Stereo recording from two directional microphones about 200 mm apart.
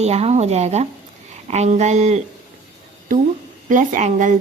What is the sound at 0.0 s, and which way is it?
Speech, 35° right (ahead or behind).